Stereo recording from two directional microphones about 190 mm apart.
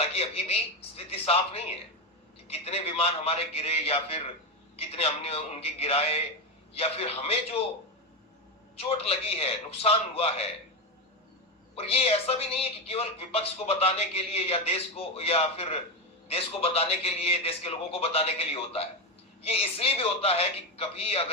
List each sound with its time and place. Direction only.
0.0 s a woman's voice: 30° left (ahead or behind)
8.7 s a woman's voice: 30° left (ahead or behind)
11.7 s a woman's voice: 30° left (ahead or behind)